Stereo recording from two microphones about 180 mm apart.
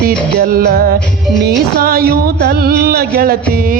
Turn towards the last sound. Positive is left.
turn(degrees=-55)  # may be behind; listen again after turning